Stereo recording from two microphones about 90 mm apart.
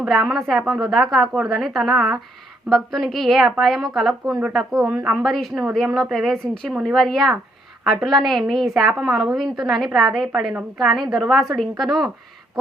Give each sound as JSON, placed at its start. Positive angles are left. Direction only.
{"t": 0.0, "sound": "a woman's voice", "side_deg": -5}